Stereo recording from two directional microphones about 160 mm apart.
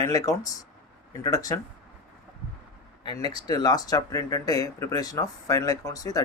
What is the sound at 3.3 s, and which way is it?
Speech, 25° left (ahead or behind).